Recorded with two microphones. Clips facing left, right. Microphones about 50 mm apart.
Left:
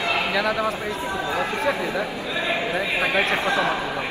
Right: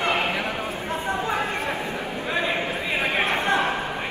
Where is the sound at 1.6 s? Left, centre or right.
Left.